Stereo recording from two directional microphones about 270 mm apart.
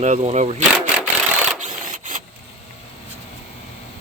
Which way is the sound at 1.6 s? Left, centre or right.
Right.